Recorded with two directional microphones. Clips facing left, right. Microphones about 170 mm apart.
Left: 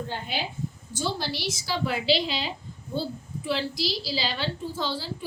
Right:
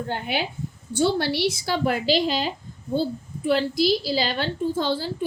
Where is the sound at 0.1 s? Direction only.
60° right (ahead or behind).